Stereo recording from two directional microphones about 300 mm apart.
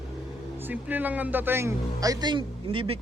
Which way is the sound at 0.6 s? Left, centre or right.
Centre.